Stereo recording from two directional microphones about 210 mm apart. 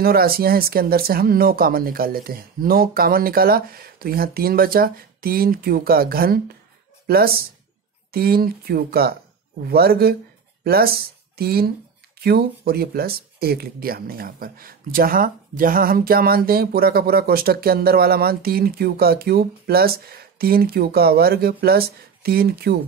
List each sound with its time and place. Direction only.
0.0 s speech: 45° right (ahead or behind)